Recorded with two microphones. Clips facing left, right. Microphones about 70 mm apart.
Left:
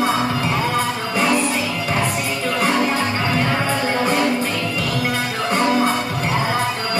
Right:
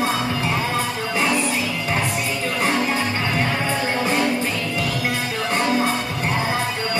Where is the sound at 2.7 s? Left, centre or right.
Left.